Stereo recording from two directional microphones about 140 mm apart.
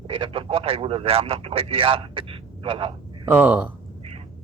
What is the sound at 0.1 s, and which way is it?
Speech, 40° right (ahead or behind).